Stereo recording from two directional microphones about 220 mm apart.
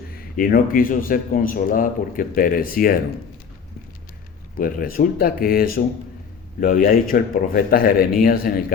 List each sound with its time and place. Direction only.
0.3 s a man's voice: 40° left (ahead or behind)
4.5 s a man's voice: 40° left (ahead or behind)